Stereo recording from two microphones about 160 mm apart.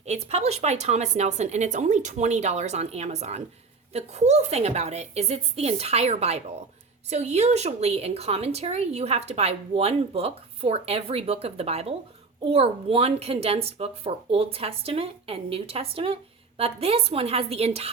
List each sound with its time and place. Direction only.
0.0 s a woman's voice: 45° right (ahead or behind)